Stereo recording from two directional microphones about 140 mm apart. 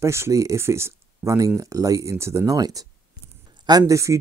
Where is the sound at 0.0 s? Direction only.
20° right (ahead or behind).